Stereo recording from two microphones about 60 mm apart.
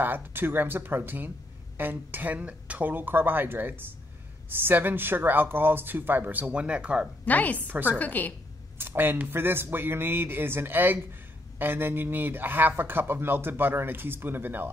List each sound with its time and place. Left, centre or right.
0.0 s speech: right; by 7.1 s centre
7.2 s a woman's voice: left
7.6 s speech: right
8.0 s a woman's voice: left
8.7 s speech: right